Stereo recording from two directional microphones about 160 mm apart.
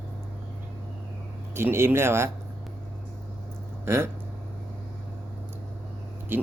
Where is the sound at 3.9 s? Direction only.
15° right (ahead or behind).